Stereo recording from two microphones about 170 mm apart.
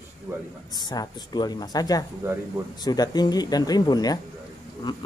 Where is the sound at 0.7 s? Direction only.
25° left (ahead or behind).